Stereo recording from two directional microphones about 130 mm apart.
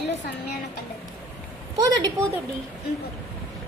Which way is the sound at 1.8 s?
30° right (ahead or behind).